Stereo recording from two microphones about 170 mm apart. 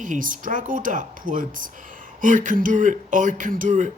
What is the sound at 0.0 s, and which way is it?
Speech, 50° right (ahead or behind).